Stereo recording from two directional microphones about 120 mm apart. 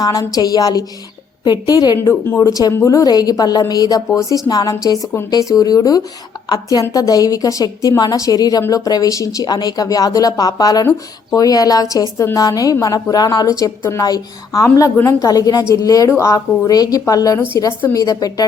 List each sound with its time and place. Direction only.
0.0 s speech: 30° left (ahead or behind)
2.2 s speech: 15° left (ahead or behind)
2.5 s a woman's voice: 30° left (ahead or behind)
15.3 s a woman's voice: 30° left (ahead or behind)